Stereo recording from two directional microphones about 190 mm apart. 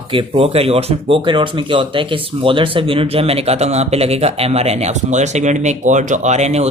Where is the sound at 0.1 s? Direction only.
30° right (ahead or behind).